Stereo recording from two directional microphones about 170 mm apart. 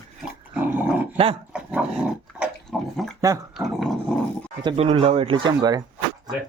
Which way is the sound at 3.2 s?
20° right (ahead or behind).